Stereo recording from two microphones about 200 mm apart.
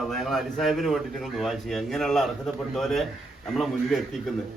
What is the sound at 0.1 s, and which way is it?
A man's voice, centre (ahead or behind).